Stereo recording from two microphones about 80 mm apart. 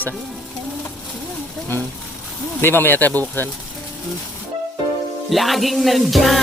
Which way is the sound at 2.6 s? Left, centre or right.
Left.